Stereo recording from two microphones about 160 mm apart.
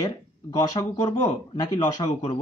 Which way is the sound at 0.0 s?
25° left (ahead or behind).